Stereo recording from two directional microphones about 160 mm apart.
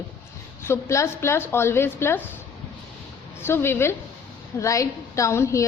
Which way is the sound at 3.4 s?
15° left (ahead or behind).